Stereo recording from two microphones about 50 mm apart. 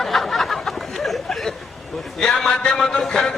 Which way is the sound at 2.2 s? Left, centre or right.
Centre.